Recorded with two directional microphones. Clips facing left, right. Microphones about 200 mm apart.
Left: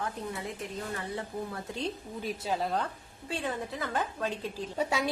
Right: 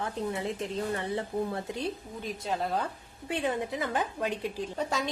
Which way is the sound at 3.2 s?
15° right (ahead or behind).